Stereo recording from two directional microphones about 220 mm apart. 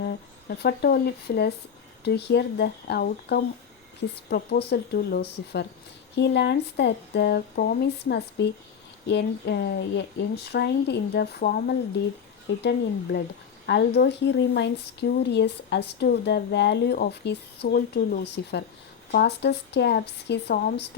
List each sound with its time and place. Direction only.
0.0 s speech: 45° left (ahead or behind)